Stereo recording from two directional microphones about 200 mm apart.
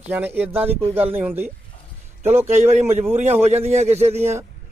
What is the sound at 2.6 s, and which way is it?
Speech, 35° right (ahead or behind).